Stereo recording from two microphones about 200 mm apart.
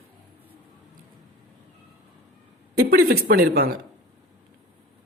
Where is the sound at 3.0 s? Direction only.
50° right (ahead or behind).